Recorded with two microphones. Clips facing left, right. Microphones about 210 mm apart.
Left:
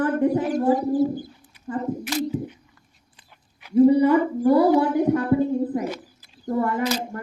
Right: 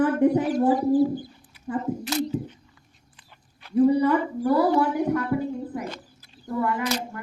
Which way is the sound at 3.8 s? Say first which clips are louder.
Left 4 dB; 25° left (ahead or behind).